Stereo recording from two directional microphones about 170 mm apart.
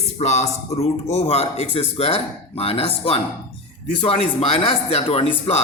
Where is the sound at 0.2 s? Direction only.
40° left (ahead or behind).